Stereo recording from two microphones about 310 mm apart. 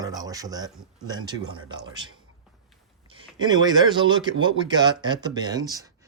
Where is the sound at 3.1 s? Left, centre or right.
Centre.